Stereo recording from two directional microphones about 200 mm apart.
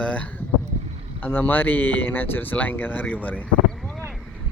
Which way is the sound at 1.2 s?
10° left (ahead or behind).